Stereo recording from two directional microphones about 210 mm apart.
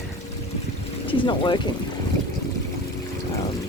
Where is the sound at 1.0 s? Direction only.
25° left (ahead or behind).